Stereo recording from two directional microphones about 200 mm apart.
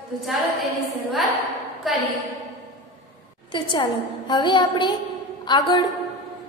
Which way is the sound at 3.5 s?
25° left (ahead or behind).